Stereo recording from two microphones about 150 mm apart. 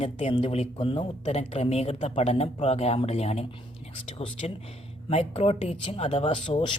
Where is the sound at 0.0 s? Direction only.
40° left (ahead or behind).